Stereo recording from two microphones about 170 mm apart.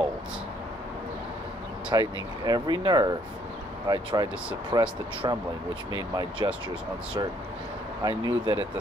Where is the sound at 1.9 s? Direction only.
25° right (ahead or behind).